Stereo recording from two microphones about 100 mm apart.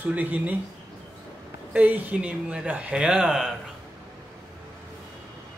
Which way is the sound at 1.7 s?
15° right (ahead or behind).